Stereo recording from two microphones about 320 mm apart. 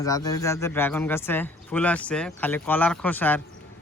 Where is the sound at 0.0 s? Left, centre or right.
Centre.